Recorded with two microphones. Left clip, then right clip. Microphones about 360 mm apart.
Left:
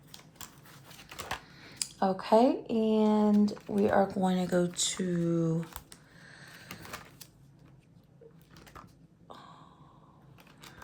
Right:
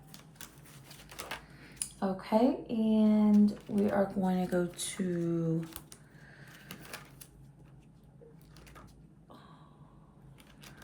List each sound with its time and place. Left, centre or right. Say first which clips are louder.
1.5 s a sound: left 8 dB; centre
2.6 s speech: left 4 dB; left
3.0 s speech: left 1 dB; centre